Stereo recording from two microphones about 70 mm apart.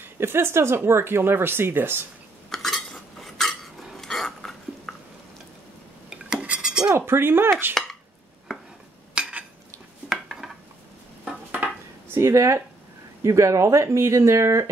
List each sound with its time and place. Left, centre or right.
0.0 s speech: right
2.5 s cutlery: centre
6.0 s rub: centre
7.0 s speech: right
9.1 s dishes: centre
10.0 s dishes: centre
12.1 s speech: right